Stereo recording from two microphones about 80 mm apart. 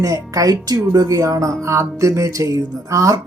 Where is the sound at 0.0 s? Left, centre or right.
Right.